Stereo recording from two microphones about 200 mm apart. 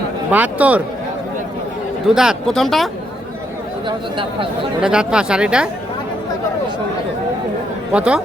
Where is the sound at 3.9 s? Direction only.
25° right (ahead or behind).